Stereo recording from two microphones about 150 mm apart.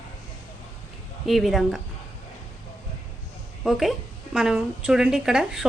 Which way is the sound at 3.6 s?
Centre (ahead or behind).